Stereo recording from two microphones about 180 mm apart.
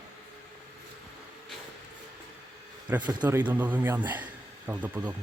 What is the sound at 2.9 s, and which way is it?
A man's voice, 10° right (ahead or behind).